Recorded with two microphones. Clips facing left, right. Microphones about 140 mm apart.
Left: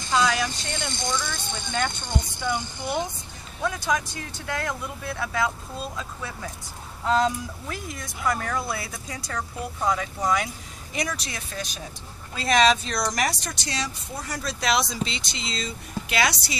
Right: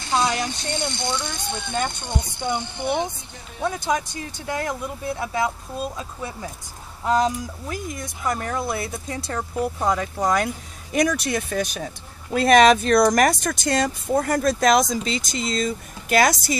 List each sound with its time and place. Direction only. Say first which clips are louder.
0.1 s a sound: right 1 dB; 25° right (ahead or behind)
0.8 s speech: left 1 dB; 65° right (ahead or behind)
1.7 s speech: right 1 dB; 10° right (ahead or behind)
2.5 s speech: right 5 dB; 60° right (ahead or behind)
3.6 s speech: right 2 dB; 30° right (ahead or behind)
10.3 s speech: right 4 dB; 55° right (ahead or behind)